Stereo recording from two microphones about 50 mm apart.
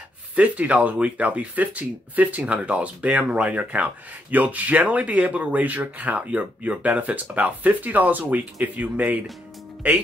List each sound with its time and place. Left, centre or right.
0.4 s speech: right